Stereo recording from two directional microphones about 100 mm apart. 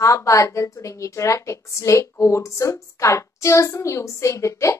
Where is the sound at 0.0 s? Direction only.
30° left (ahead or behind).